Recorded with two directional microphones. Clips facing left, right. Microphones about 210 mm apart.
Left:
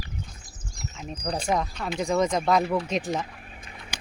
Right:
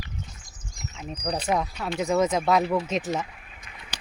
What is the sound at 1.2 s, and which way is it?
Speech, 5° right (ahead or behind).